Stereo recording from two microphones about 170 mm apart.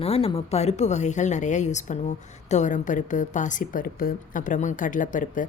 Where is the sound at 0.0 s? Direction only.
35° left (ahead or behind).